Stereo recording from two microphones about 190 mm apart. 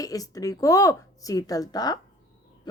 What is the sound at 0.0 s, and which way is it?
Speech, 20° left (ahead or behind).